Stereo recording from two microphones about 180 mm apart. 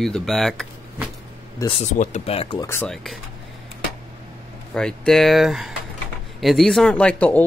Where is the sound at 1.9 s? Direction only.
40° left (ahead or behind).